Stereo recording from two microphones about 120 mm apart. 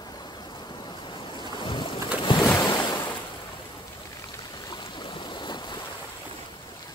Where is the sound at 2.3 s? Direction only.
45° left (ahead or behind).